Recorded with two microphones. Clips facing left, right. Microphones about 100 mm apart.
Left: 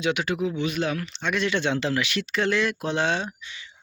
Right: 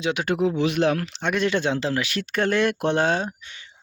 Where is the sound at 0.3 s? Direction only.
60° right (ahead or behind).